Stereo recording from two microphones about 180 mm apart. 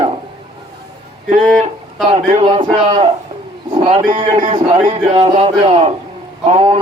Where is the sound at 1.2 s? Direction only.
40° right (ahead or behind).